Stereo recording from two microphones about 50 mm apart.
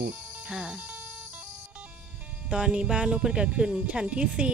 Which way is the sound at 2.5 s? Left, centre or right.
Centre.